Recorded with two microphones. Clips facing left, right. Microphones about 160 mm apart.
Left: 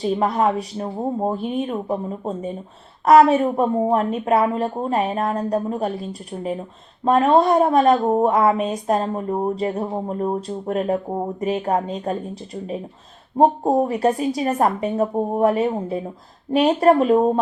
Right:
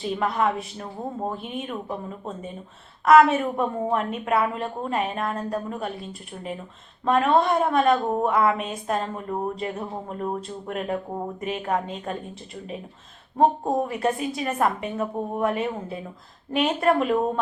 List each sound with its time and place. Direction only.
0.0 s a woman's voice: 40° left (ahead or behind)